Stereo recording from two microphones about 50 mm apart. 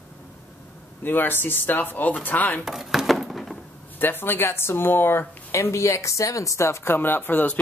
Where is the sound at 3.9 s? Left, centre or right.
Left.